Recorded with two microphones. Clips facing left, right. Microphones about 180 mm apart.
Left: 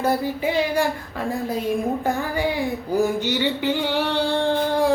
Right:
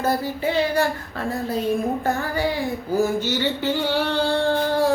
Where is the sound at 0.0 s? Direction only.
15° left (ahead or behind).